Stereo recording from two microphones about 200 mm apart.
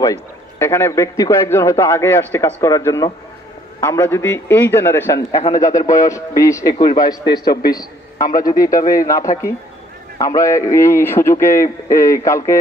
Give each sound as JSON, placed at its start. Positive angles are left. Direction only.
{"t": 0.0, "sound": "a man's voice", "side_deg": 15}
{"t": 7.3, "sound": "a man's voice", "side_deg": 55}
{"t": 8.4, "sound": "a man's voice", "side_deg": 15}